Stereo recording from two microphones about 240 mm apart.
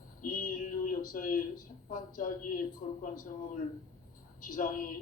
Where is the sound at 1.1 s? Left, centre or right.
Left.